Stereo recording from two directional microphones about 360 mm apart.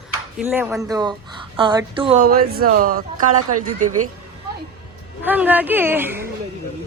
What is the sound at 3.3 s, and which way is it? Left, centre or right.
Speech, right.